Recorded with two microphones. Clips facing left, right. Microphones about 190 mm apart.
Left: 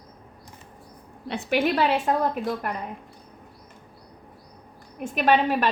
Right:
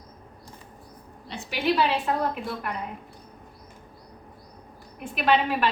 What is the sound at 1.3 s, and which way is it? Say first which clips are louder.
A woman's voice: left 3 dB; 55° left (ahead or behind).